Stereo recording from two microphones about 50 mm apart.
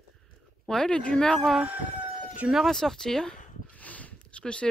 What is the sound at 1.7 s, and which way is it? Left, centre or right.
Chicken, right.